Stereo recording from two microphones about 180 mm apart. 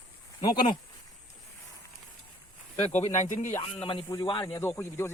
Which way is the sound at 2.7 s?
35° left (ahead or behind).